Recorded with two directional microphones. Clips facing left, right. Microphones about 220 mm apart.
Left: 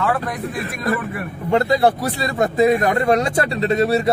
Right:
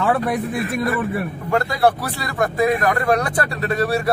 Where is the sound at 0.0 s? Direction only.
30° right (ahead or behind).